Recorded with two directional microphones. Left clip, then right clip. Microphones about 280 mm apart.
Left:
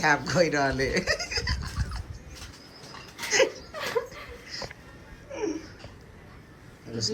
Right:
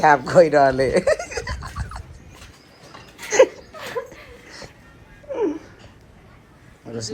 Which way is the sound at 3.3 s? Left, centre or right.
Centre.